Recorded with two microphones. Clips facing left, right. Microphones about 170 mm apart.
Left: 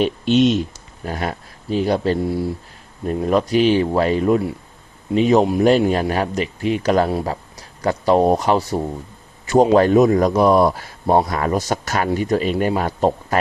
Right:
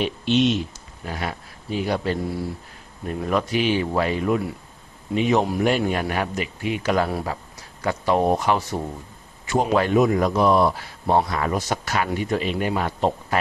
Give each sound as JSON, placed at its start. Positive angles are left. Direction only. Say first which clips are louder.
{"t": 0.0, "sound": "a man's voice", "louder": "left 5 dB", "side_deg": 45}